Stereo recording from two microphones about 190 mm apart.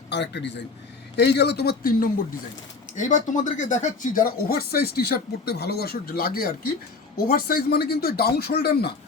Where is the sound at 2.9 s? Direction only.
40° left (ahead or behind).